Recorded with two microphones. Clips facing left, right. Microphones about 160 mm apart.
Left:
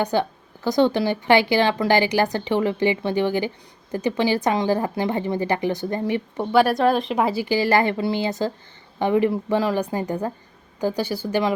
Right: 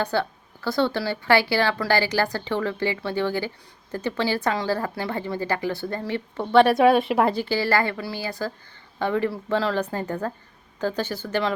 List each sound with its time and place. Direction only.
0.0 s a woman's voice: 15° left (ahead or behind)
6.5 s speech: centre (ahead or behind)
7.4 s a woman's voice: 15° left (ahead or behind)